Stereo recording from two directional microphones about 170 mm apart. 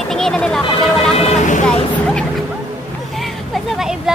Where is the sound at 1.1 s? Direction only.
40° left (ahead or behind).